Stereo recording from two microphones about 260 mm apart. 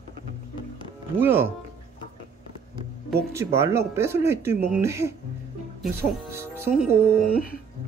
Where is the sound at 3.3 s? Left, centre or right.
Centre.